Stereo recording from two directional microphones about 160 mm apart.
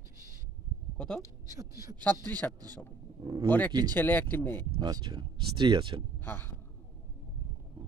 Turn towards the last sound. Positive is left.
turn(degrees=15)  # may be behind; listen again after turning